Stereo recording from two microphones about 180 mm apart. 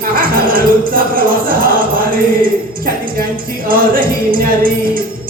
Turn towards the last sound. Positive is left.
turn(degrees=-50)  # may be behind; listen again after turning